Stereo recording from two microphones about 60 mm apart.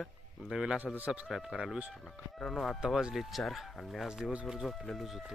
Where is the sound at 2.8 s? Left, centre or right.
Centre.